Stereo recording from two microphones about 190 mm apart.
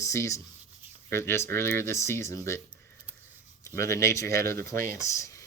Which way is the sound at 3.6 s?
15° left (ahead or behind).